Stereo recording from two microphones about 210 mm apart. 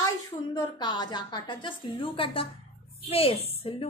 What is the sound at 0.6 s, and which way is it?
A woman's voice, 20° left (ahead or behind).